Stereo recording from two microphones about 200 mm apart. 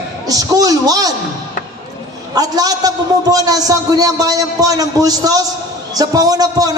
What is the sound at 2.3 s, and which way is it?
A man's voice, 20° right (ahead or behind).